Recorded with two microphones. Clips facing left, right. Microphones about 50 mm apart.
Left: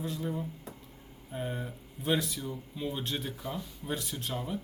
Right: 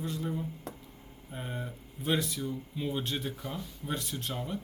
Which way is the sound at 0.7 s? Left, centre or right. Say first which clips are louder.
Right 3 dB; right.